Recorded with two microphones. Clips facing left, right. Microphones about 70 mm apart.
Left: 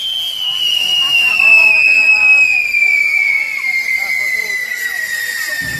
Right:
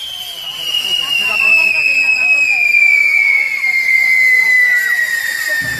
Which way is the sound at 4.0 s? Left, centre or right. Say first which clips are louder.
Right 7 dB; right.